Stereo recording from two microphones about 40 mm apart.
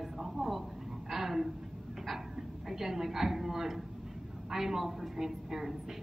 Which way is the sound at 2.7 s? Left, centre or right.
Centre.